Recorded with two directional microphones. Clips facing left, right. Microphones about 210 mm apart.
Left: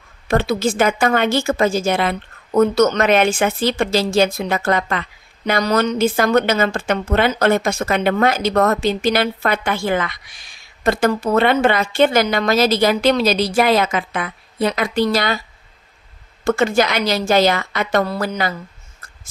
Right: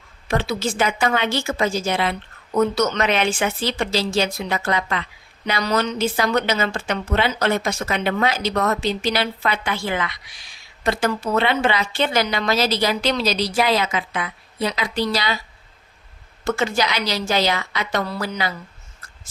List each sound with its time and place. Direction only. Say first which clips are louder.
0.3 s a woman's voice: left 5 dB; 50° left (ahead or behind)
16.4 s a woman's voice: left 5 dB; 50° left (ahead or behind)